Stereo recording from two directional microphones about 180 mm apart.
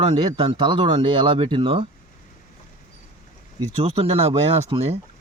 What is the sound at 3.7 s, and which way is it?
Speech, 35° right (ahead or behind).